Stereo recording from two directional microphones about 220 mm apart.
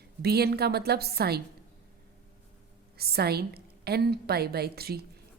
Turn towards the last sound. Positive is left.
turn(degrees=-45)  # may be behind; listen again after turning